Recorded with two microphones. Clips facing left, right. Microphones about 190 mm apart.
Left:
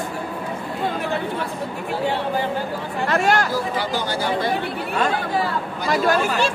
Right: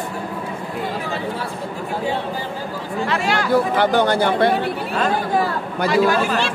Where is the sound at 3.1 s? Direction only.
45° left (ahead or behind).